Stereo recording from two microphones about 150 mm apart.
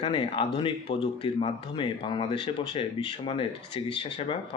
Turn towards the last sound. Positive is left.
turn(degrees=30)  # may be behind; listen again after turning